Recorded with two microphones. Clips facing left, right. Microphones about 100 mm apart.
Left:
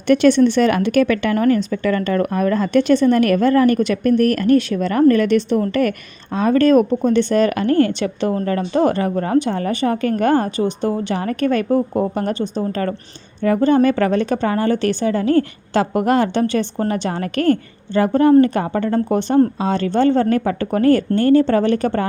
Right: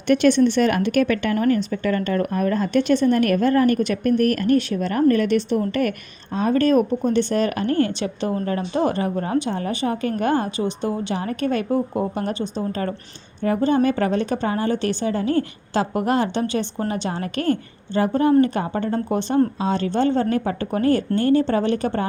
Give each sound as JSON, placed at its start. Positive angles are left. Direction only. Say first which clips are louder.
{"t": 0.3, "sound": "speech", "louder": "left 3 dB", "side_deg": 90}
{"t": 6.3, "sound": "speech", "louder": "left 4 dB", "side_deg": 80}
{"t": 18.9, "sound": "speech", "louder": "left 6 dB", "side_deg": 55}
{"t": 19.5, "sound": "speech", "louder": "left 3 dB", "side_deg": 65}